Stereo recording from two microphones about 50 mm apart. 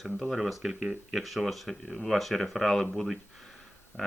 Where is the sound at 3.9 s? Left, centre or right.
Left.